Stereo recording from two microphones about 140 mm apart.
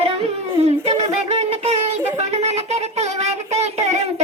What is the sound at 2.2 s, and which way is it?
Child singing, 50° right (ahead or behind).